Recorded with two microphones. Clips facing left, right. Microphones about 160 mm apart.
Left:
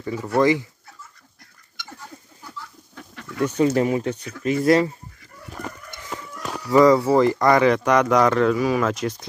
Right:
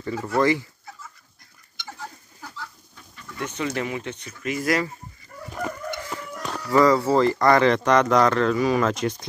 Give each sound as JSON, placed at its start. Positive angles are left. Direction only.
{"t": 0.0, "sound": "speech", "side_deg": 15}
{"t": 2.9, "sound": "a sound", "side_deg": 70}
{"t": 3.3, "sound": "speech", "side_deg": 40}
{"t": 6.7, "sound": "speech", "side_deg": 15}